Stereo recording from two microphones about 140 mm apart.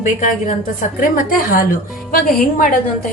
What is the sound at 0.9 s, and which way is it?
Speech, 75° left (ahead or behind).